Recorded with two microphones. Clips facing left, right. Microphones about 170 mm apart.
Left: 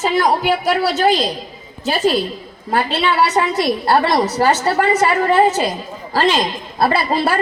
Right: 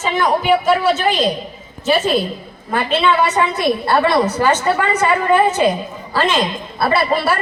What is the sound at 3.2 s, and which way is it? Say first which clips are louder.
A woman's voice: left 1 dB; 40° left (ahead or behind).